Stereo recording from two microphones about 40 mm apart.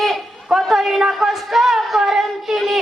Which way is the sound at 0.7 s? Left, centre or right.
Centre.